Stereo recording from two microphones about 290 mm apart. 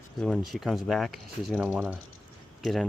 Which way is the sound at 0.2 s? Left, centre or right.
Centre.